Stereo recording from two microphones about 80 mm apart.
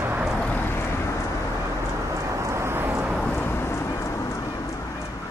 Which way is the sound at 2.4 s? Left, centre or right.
Right.